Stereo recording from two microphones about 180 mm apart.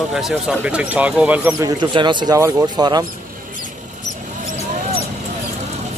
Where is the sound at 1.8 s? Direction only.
25° right (ahead or behind).